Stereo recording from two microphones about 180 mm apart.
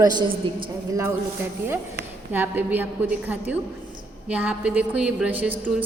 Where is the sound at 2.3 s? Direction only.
10° right (ahead or behind).